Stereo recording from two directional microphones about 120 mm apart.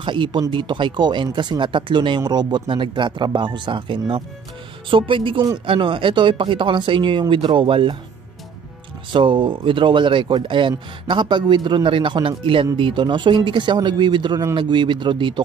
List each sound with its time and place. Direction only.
0.0 s speech: 40° right (ahead or behind)
9.1 s speech: 45° right (ahead or behind)